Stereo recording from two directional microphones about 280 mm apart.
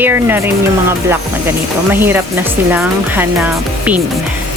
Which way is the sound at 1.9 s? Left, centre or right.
Centre.